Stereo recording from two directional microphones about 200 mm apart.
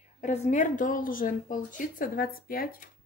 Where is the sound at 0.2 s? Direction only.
35° left (ahead or behind).